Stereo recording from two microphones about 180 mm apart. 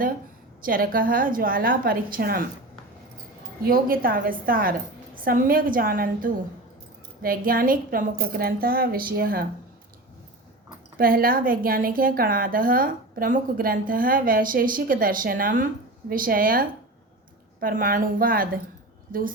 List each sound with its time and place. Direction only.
0.6 s a woman's voice: 50° right (ahead or behind)
3.6 s a woman's voice: 55° right (ahead or behind)
10.9 s a woman's voice: 55° right (ahead or behind)